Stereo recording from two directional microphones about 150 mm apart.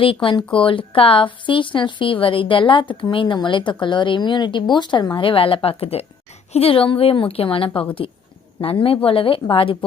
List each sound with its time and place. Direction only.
0.0 s a woman's voice: 35° left (ahead or behind)